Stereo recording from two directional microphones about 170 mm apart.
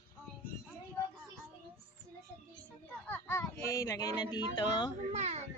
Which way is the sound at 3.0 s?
15° left (ahead or behind).